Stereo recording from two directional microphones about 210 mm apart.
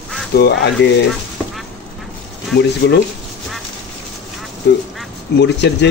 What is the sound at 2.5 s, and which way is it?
Speech, 55° left (ahead or behind).